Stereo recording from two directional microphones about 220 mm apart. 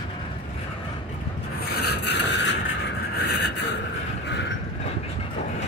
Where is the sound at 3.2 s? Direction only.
50° left (ahead or behind).